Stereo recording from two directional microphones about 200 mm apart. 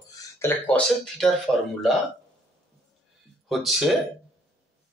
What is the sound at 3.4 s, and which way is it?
Speech, centre (ahead or behind).